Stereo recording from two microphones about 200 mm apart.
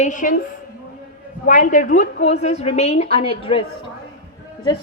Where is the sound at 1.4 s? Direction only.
40° left (ahead or behind).